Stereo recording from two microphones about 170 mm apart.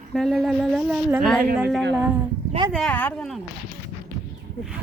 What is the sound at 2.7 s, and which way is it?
Speech, centre (ahead or behind).